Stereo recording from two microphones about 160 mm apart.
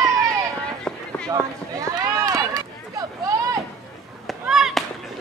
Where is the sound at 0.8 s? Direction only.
5° left (ahead or behind).